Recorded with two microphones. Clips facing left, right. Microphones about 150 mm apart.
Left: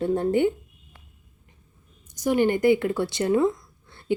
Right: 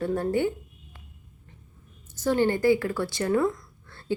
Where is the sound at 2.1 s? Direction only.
15° left (ahead or behind).